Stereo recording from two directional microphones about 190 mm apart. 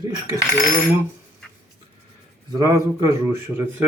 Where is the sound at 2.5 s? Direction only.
20° right (ahead or behind).